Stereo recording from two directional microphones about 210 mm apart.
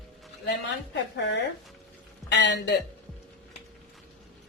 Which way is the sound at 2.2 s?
55° left (ahead or behind).